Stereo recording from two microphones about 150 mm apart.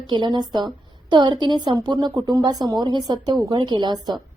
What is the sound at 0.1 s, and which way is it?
A woman's voice, 30° right (ahead or behind).